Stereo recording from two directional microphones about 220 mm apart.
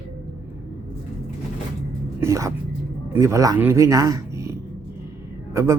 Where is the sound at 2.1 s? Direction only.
15° right (ahead or behind).